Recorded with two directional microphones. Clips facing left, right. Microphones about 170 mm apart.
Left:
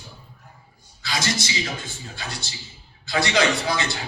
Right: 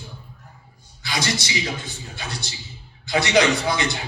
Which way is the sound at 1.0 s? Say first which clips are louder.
Right 1 dB; 20° right (ahead or behind).